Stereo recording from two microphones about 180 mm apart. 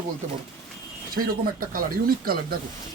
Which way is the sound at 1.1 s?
50° right (ahead or behind).